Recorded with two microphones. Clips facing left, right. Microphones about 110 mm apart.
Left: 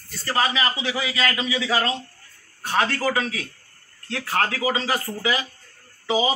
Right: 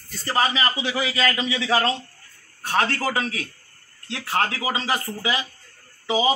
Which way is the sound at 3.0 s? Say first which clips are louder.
Left 1 dB; 35° right (ahead or behind).